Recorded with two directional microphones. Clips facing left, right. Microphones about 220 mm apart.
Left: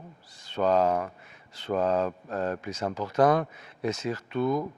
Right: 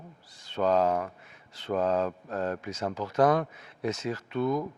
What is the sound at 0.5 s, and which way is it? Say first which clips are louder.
Speech: left 1 dB; 20° left (ahead or behind).